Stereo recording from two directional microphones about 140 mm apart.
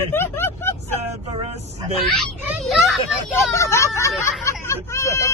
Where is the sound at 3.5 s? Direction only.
20° left (ahead or behind).